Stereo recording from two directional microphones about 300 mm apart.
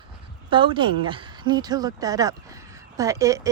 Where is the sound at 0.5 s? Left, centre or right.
Centre.